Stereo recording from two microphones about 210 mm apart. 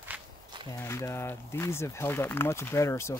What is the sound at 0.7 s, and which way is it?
Speech, 15° left (ahead or behind).